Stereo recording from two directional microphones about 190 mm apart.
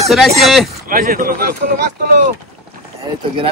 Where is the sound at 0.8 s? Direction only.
45° right (ahead or behind).